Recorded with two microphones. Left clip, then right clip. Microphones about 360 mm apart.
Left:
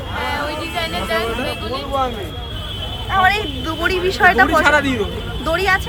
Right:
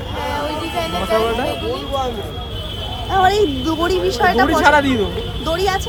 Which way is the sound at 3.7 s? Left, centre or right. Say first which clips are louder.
Right 1 dB; centre.